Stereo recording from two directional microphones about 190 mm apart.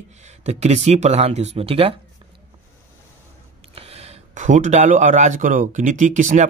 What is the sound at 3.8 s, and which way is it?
Speech, 30° right (ahead or behind).